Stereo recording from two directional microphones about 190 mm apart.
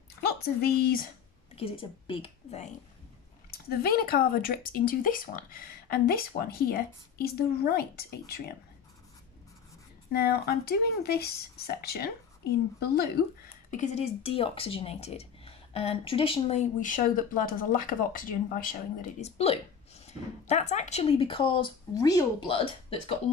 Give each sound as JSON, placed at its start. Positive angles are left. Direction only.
{"t": 0.2, "sound": "a woman's voice", "side_deg": 55}
{"t": 1.5, "sound": "a woman's voice", "side_deg": 30}
{"t": 3.5, "sound": "speech", "side_deg": 55}
{"t": 10.1, "sound": "speech", "side_deg": 55}
{"t": 13.7, "sound": "speech", "side_deg": 40}